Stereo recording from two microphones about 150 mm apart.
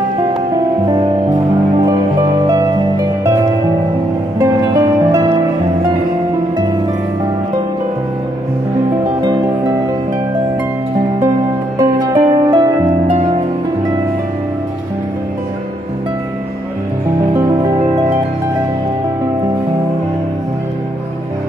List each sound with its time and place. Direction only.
2.4 s music: 25° right (ahead or behind)
4.4 s music: 20° right (ahead or behind)
9.2 s music: 25° right (ahead or behind)
11.8 s music: 25° right (ahead or behind)
17.3 s music: 20° right (ahead or behind)